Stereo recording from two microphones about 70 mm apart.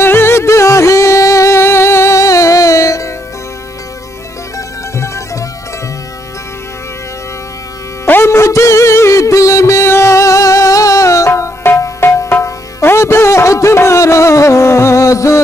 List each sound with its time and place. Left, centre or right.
0.0 s music: left
4.6 s music: left
8.1 s music: left